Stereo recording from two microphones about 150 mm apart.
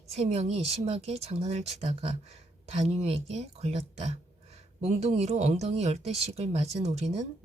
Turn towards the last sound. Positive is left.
turn(degrees=-45)  # may be behind; listen again after turning